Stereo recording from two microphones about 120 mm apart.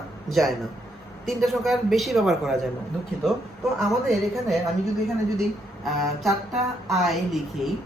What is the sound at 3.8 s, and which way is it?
Speech, centre (ahead or behind).